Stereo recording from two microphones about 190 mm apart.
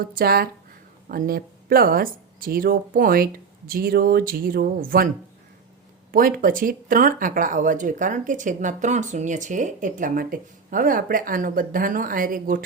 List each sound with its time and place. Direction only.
0.0 s speech: 50° right (ahead or behind)